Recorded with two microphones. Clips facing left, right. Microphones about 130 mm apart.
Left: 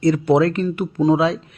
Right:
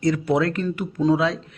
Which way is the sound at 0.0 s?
30° left (ahead or behind).